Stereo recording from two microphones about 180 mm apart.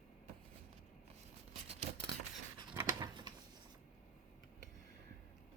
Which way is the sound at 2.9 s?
25° right (ahead or behind).